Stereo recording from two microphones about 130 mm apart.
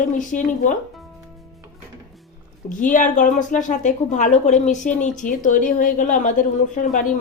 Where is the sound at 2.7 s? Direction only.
85° left.